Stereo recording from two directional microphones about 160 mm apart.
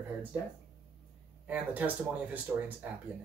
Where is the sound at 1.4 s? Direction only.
10° right (ahead or behind).